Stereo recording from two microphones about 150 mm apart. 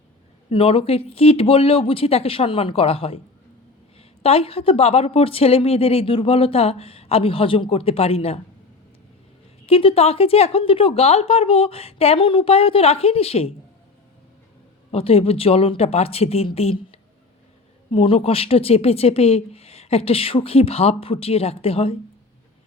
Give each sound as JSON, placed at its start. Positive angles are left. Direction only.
{"t": 0.5, "sound": "speech", "side_deg": 40}
{"t": 9.6, "sound": "speech", "side_deg": 40}
{"t": 14.8, "sound": "speech", "side_deg": 40}